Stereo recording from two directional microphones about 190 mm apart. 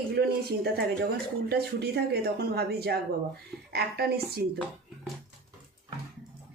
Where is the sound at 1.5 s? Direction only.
60° right (ahead or behind).